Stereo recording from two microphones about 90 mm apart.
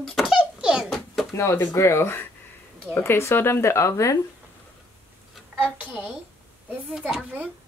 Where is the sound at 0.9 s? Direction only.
Centre (ahead or behind).